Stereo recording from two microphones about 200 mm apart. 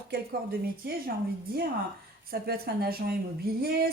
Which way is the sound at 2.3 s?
50° right (ahead or behind).